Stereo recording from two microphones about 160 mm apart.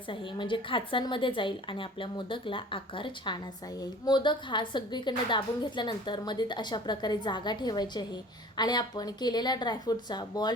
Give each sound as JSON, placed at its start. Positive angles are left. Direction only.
{"t": 0.1, "sound": "a woman's voice", "side_deg": 30}